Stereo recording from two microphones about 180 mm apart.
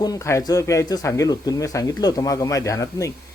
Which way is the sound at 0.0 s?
20° left (ahead or behind).